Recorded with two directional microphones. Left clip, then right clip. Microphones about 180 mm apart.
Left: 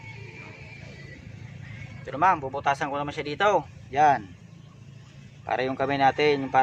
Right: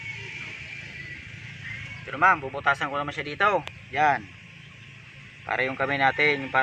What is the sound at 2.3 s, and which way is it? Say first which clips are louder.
Speech: right 1 dB; 25° left (ahead or behind).